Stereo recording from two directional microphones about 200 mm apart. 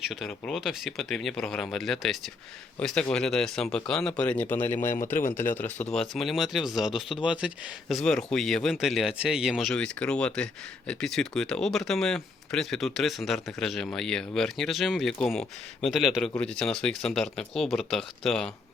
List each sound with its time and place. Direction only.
0.1 s speech: centre (ahead or behind)